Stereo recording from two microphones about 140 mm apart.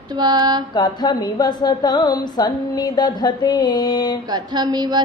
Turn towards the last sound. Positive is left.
turn(degrees=-30)  # may be behind; listen again after turning